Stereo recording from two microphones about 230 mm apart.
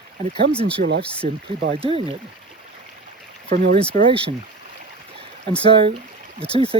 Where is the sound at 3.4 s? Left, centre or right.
Right.